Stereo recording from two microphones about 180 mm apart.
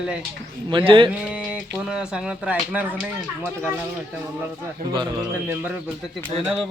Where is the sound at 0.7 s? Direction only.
30° right (ahead or behind).